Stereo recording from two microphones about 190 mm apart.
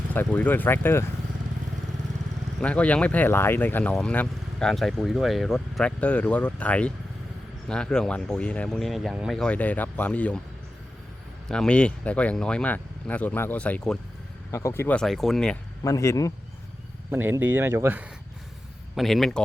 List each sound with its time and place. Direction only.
0.1 s speech: 10° left (ahead or behind)
2.6 s speech: 5° left (ahead or behind)
11.4 s speech: 5° left (ahead or behind)
15.8 s speech: 15° left (ahead or behind)
17.1 s speech: 10° right (ahead or behind)
18.9 s speech: centre (ahead or behind)